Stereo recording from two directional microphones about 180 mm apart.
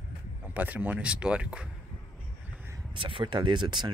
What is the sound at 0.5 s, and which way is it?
Speech, 10° right (ahead or behind).